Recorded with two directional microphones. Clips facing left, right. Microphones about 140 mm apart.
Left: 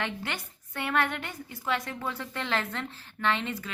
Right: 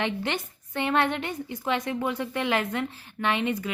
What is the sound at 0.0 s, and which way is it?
A woman's voice, 20° right (ahead or behind).